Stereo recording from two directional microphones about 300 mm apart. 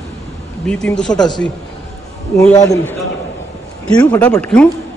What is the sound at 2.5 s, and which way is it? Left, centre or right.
Speech, centre.